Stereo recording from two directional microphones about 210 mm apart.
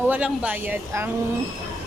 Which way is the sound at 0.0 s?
5° right (ahead or behind).